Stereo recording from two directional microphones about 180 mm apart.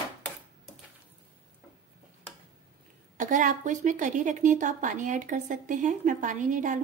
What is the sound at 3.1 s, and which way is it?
A woman's voice, 45° right (ahead or behind).